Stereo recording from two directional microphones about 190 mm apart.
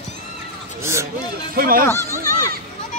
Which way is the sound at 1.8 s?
15° left (ahead or behind).